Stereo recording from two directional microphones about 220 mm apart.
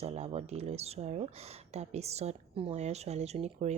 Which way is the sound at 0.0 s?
30° right (ahead or behind).